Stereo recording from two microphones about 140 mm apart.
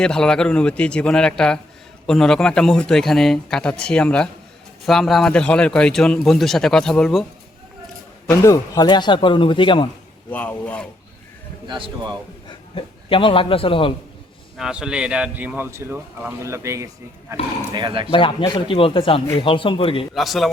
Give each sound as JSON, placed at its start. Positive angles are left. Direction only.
{"t": 0.0, "sound": "a man's voice", "side_deg": 5}
{"t": 8.3, "sound": "a man's voice", "side_deg": 20}
{"t": 10.2, "sound": "speech", "side_deg": 10}
{"t": 11.6, "sound": "speech", "side_deg": -35}
{"t": 12.5, "sound": "a man's voice", "side_deg": 40}
{"t": 14.5, "sound": "a man's voice", "side_deg": -5}
{"t": 17.7, "sound": "speech", "side_deg": -35}
{"t": 18.1, "sound": "a man's voice", "side_deg": 35}
{"t": 20.1, "sound": "a man's voice", "side_deg": 0}